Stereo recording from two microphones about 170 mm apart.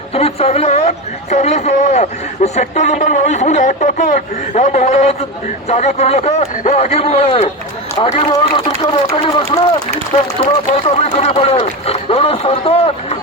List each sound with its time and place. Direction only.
0.1 s speech: 35° left (ahead or behind)